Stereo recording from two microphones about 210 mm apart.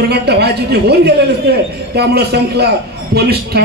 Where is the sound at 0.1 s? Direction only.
50° right (ahead or behind).